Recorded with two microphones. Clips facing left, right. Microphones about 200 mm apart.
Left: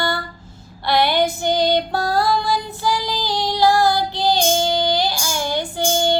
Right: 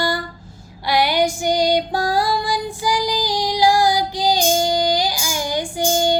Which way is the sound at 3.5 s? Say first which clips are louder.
Even; 15° right (ahead or behind).